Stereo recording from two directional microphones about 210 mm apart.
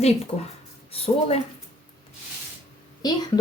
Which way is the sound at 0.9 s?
25° left (ahead or behind).